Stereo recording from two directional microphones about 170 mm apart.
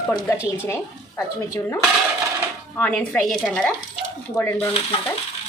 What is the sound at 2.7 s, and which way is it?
Speech, 10° left (ahead or behind).